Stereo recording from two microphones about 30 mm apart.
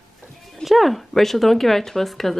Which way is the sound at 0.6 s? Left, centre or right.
Centre.